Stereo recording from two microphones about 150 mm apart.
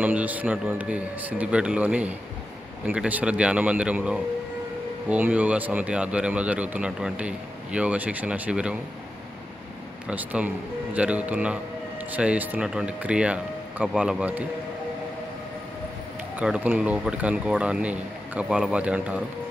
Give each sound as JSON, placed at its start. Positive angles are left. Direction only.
{"t": 0.0, "sound": "speech", "side_deg": -10}
{"t": 10.0, "sound": "speech", "side_deg": -10}
{"t": 16.3, "sound": "speech", "side_deg": -10}